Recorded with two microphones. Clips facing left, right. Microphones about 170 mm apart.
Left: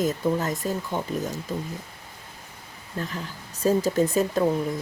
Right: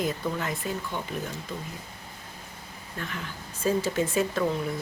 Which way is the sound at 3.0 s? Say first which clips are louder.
Left 4 dB; 35° left (ahead or behind).